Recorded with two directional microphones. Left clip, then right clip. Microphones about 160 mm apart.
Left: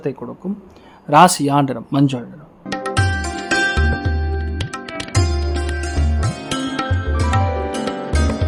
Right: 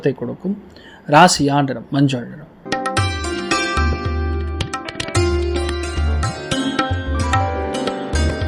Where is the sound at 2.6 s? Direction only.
Centre (ahead or behind).